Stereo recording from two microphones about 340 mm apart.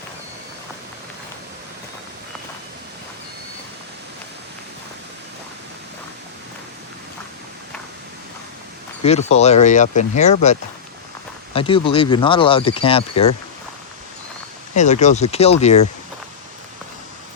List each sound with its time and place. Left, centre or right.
9.0 s speech: centre
14.8 s speech: left